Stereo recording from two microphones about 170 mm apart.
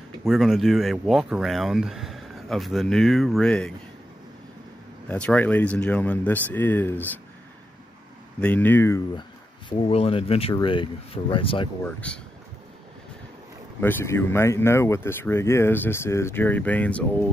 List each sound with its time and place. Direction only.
0.2 s speech: centre (ahead or behind)
5.0 s speech: 10° left (ahead or behind)
8.4 s speech: 10° left (ahead or behind)
9.7 s speech: 30° left (ahead or behind)
11.8 s speech: 5° left (ahead or behind)
13.7 s speech: 15° left (ahead or behind)